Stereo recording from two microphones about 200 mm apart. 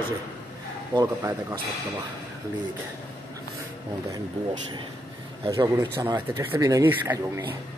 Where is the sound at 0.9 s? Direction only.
15° right (ahead or behind).